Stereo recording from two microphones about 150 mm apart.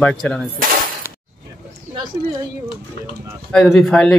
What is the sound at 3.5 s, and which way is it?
Speech, 5° left (ahead or behind).